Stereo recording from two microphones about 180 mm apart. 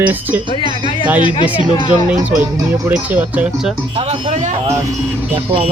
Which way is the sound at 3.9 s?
40° right (ahead or behind).